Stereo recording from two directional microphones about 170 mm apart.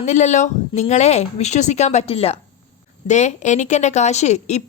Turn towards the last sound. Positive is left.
turn(degrees=40)  # may be behind; listen again after turning